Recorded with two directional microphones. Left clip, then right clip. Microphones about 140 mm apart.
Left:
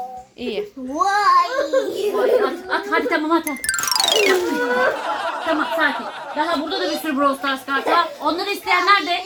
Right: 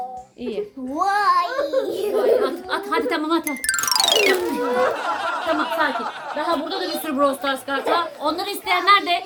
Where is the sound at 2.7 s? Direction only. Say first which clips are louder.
Left 3 dB; 45° right (ahead or behind).